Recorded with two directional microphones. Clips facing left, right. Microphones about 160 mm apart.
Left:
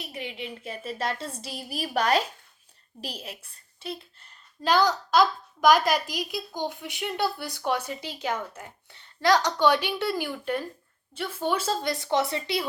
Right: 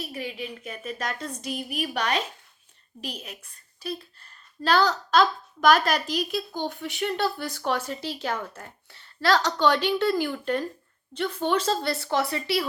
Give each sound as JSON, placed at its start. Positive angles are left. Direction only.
{"t": 0.0, "sound": "a woman's voice", "side_deg": 20}